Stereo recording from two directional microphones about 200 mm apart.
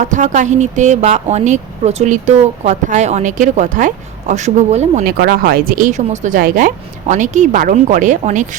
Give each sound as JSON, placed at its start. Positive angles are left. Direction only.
{"t": 0.0, "sound": "speech", "side_deg": -40}
{"t": 5.0, "sound": "speech", "side_deg": -50}